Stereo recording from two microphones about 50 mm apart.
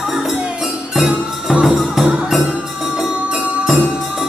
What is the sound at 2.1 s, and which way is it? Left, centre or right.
Music, centre.